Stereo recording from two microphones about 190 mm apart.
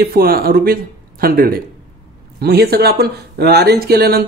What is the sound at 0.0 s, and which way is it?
Speech, 50° right (ahead or behind).